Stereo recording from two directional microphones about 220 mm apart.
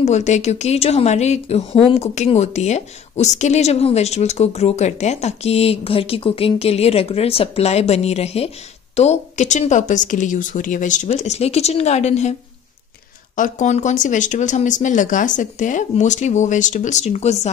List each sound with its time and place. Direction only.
0.0 s a woman's voice: 30° left (ahead or behind)
13.4 s speech: 35° left (ahead or behind)